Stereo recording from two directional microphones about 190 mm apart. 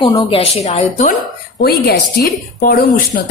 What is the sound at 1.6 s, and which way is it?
A woman's voice, 55° left (ahead or behind).